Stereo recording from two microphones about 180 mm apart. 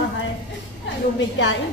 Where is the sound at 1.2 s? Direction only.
90° left.